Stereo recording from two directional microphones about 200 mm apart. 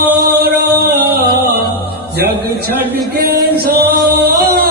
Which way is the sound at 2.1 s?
50° right (ahead or behind).